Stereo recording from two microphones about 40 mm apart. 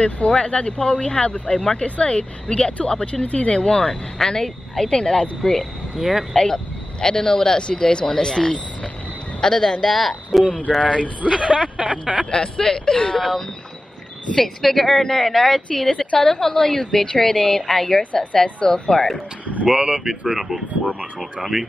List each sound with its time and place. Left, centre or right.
0.3 s speech: left
3.6 s speech: left
5.4 s speech: centre
5.9 s speech: centre
6.3 s speech: centre
10.8 s speech: left
11.2 s speech: right
12.3 s speech: centre
18.9 s speech: centre
19.6 s speech: right
20.0 s speech: centre
20.8 s speech: centre
21.2 s speech: centre